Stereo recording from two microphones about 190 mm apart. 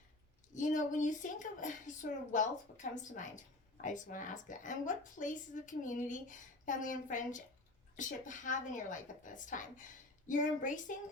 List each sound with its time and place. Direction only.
0.5 s a woman's voice: 40° left (ahead or behind)